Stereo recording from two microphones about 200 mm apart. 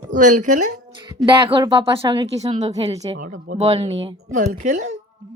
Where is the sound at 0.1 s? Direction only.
40° right (ahead or behind).